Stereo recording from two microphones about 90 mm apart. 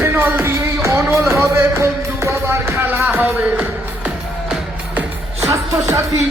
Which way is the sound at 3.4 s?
15° right (ahead or behind).